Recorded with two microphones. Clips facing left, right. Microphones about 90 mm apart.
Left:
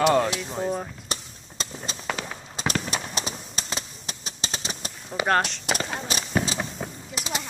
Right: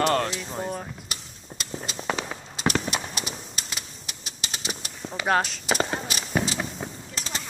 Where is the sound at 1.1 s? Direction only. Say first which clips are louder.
Left 4 dB; 30° left (ahead or behind).